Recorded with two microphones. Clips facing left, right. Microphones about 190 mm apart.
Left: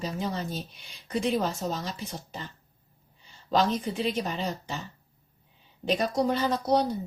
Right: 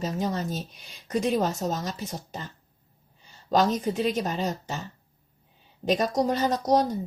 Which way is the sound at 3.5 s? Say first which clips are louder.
Right 3 dB; 45° right (ahead or behind).